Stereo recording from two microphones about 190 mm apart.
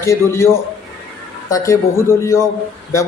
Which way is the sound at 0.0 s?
15° left (ahead or behind).